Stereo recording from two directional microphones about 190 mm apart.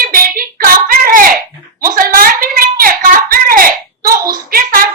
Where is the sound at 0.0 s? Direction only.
50° right (ahead or behind).